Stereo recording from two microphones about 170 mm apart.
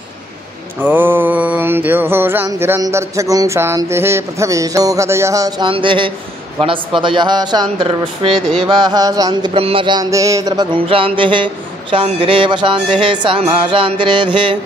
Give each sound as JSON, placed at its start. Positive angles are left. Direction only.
{"t": 0.8, "sound": "mantra", "side_deg": -10}
{"t": 5.7, "sound": "speech", "side_deg": -30}